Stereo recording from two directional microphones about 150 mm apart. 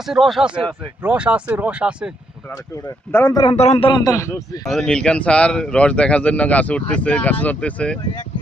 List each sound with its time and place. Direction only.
0.1 s speech: centre (ahead or behind)
3.1 s speech: 15° left (ahead or behind)
3.5 s speech: 45° left (ahead or behind)
4.0 s speech: 20° left (ahead or behind)
4.6 s speech: 5° left (ahead or behind)